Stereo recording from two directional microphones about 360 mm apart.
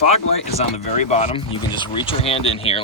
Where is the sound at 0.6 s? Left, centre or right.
Centre.